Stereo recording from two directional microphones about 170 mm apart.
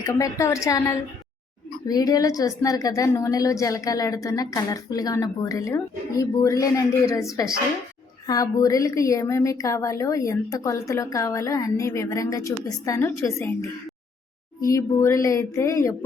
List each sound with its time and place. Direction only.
0.0 s a woman's voice: 20° left (ahead or behind)